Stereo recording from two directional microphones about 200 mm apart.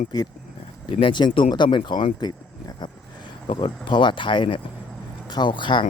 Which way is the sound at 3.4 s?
25° left (ahead or behind).